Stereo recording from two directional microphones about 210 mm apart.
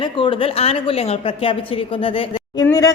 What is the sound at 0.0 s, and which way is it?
A woman's voice, 25° left (ahead or behind).